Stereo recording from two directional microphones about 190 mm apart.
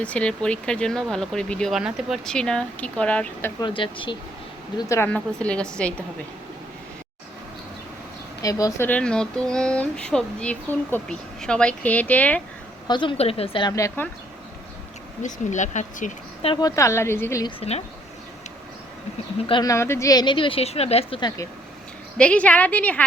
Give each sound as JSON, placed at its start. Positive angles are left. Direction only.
{"t": 0.0, "sound": "speech", "side_deg": 5}
{"t": 3.6, "sound": "speech", "side_deg": 25}
{"t": 4.8, "sound": "speech", "side_deg": 15}
{"t": 8.4, "sound": "speech", "side_deg": 20}
{"t": 12.9, "sound": "speech", "side_deg": 25}
{"t": 15.2, "sound": "speech", "side_deg": 40}
{"t": 16.5, "sound": "speech", "side_deg": 20}
{"t": 17.6, "sound": "speech", "side_deg": 35}
{"t": 19.5, "sound": "speech", "side_deg": 20}
{"t": 22.2, "sound": "speech", "side_deg": 5}